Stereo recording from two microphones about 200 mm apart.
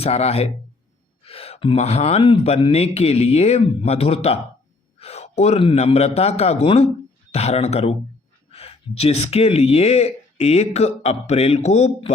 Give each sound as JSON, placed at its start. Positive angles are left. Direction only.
{"t": 0.0, "sound": "speech", "side_deg": 30}
{"t": 4.9, "sound": "gasp", "side_deg": 30}
{"t": 5.4, "sound": "speech", "side_deg": 30}